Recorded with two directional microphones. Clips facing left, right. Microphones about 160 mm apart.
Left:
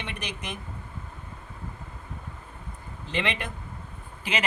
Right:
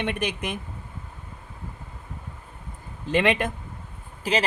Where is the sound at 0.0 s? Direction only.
55° right (ahead or behind).